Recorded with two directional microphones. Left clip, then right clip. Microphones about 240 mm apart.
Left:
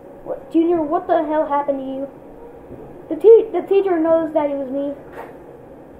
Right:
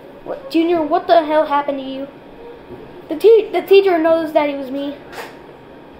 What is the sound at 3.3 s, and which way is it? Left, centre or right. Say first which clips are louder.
Speech: even; right.